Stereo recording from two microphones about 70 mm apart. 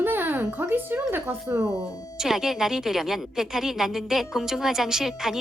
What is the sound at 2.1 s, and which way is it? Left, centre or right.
Speech, centre.